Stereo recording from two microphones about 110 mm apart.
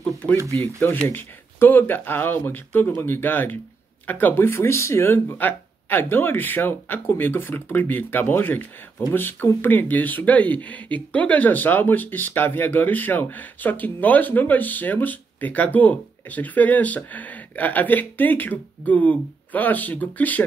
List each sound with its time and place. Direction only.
0.0 s speech: 10° left (ahead or behind)